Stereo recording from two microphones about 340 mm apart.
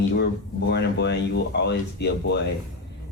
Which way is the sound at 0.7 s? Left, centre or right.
Left.